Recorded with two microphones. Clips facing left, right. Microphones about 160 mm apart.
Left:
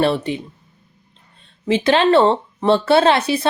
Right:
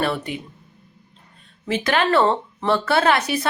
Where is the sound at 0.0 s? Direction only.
25° left (ahead or behind).